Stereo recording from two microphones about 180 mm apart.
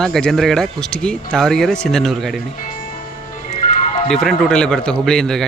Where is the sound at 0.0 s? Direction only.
5° left (ahead or behind).